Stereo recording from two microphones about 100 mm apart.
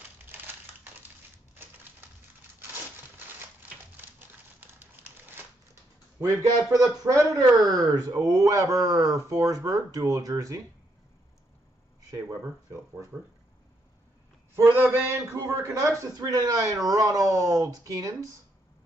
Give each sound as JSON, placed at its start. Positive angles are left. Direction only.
{"t": 3.3, "sound": "typewriter", "side_deg": -20}
{"t": 6.7, "sound": "a man's voice", "side_deg": -35}
{"t": 14.5, "sound": "a man's voice", "side_deg": -25}